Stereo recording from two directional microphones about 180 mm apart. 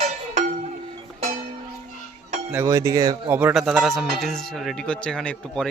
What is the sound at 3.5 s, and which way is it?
Speech, centre (ahead or behind).